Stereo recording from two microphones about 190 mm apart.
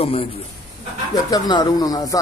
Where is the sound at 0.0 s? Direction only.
30° left (ahead or behind).